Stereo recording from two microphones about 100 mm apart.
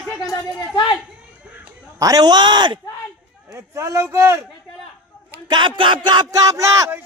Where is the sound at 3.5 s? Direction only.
30° right (ahead or behind).